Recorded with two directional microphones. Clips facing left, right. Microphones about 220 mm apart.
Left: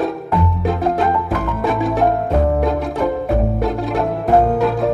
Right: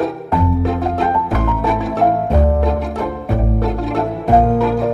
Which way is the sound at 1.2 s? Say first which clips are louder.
Right 1 dB; centre (ahead or behind).